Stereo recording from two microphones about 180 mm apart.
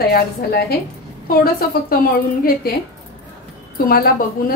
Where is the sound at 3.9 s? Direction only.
55° left (ahead or behind).